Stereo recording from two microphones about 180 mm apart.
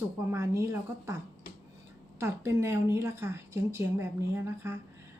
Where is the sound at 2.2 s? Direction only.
15° right (ahead or behind).